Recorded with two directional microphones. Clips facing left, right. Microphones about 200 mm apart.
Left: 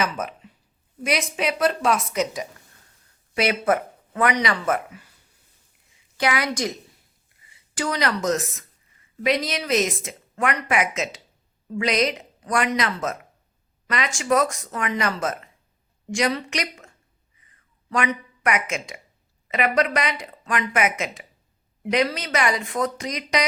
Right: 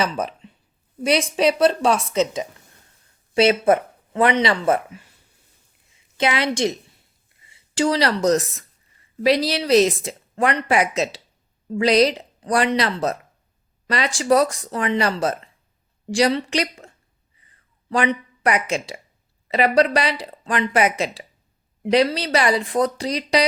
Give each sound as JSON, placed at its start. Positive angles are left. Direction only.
{"t": 0.0, "sound": "speech", "side_deg": -30}
{"t": 6.1, "sound": "a woman's voice", "side_deg": -25}
{"t": 17.4, "sound": "a sound", "side_deg": -30}
{"t": 19.5, "sound": "speech", "side_deg": -35}